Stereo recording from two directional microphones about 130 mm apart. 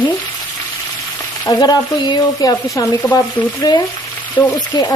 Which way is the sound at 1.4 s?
30° left (ahead or behind).